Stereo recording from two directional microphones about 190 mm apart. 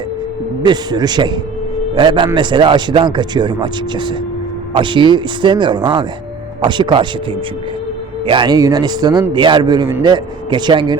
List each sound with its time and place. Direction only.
0.6 s a man's voice: 20° right (ahead or behind)
4.7 s a man's voice: 25° right (ahead or behind)
8.3 s a man's voice: 25° right (ahead or behind)